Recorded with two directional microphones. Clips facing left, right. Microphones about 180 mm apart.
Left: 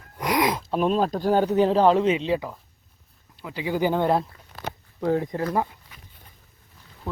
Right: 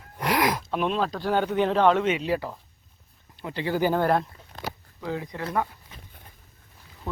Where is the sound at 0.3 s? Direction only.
20° left (ahead or behind).